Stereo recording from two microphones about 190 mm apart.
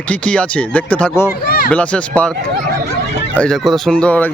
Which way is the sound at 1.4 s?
55° left (ahead or behind).